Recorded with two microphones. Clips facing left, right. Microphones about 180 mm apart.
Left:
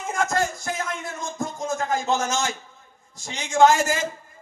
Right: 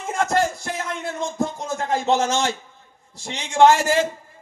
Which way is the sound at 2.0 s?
30° right (ahead or behind).